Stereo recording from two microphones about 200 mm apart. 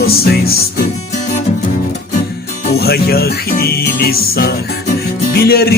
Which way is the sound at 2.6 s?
50° left (ahead or behind).